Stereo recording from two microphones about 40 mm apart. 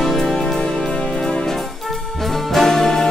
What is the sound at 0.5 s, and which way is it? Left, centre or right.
Music, centre.